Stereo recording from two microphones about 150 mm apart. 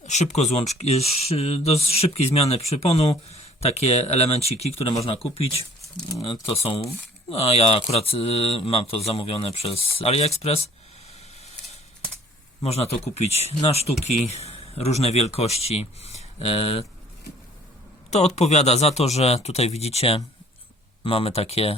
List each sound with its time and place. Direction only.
0.0 s speech: 50° left (ahead or behind)
12.6 s speech: 45° left (ahead or behind)
18.3 s speech: 45° left (ahead or behind)